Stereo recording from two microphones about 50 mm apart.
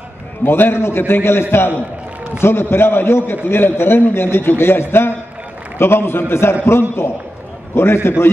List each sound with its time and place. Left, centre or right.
0.5 s a man's voice: left